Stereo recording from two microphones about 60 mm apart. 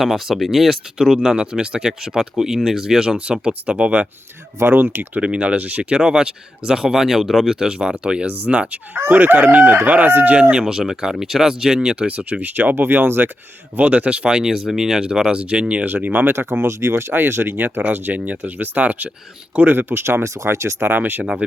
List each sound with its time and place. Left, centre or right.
0.0 s speech: centre; by 4.1 s right
4.6 s speech: right
5.2 s speech: centre
9.0 s speech: right
10.5 s speech: centre; by 13.3 s right
13.7 s speech: right
15.8 s speech: right
20.2 s speech: right